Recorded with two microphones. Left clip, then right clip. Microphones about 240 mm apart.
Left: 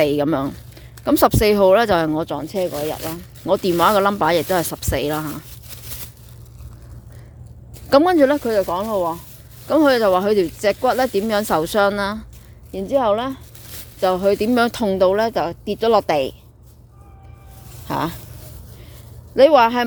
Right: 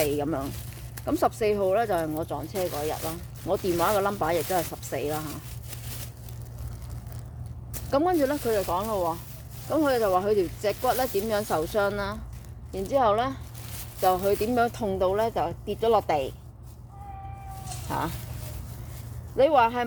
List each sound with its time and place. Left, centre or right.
0.0 s speech: left
7.9 s speech: left
17.8 s speech: left
19.4 s speech: left